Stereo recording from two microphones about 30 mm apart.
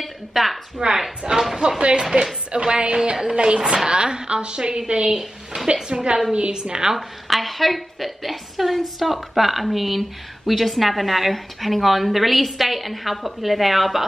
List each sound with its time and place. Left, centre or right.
0.0 s a woman's voice: centre
0.8 s a woman's voice: right
2.0 s a woman's voice: right
3.1 s a woman's voice: right
3.3 s a woman's voice: right
7.0 s speech: centre